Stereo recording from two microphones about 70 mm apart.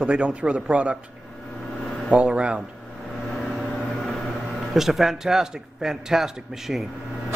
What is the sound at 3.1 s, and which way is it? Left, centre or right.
Vehicle, centre.